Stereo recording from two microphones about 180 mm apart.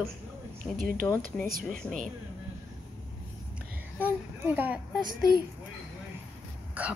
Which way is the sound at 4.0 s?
10° right (ahead or behind).